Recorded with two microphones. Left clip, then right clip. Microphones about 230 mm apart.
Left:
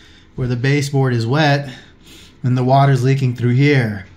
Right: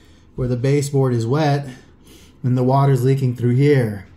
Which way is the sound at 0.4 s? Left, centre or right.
Centre.